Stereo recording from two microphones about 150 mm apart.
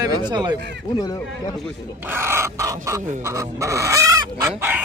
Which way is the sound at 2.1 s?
15° right (ahead or behind).